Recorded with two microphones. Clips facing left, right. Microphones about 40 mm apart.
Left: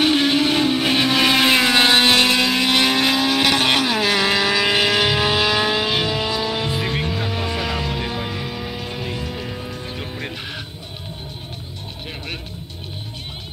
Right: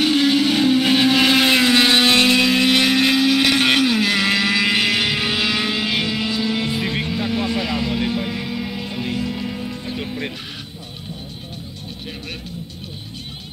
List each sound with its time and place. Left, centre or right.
0.0 s music: left
0.5 s vehicle: centre
1.6 s vehicle: centre
2.3 s music: centre
3.2 s vehicle: centre
3.5 s vehicle: centre
3.9 s vehicle: centre
4.3 s vehicle: centre
5.0 s music: centre
6.3 s music: centre
8.2 s music: centre
9.9 s music: centre